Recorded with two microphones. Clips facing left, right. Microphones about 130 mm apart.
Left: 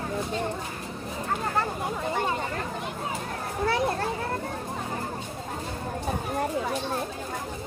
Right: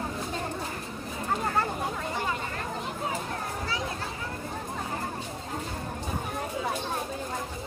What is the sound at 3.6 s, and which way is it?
Children playing, 60° left (ahead or behind).